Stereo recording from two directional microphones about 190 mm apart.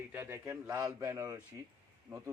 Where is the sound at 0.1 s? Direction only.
10° right (ahead or behind).